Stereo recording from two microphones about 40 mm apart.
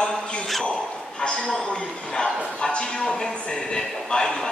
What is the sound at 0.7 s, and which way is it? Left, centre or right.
A man's voice, left.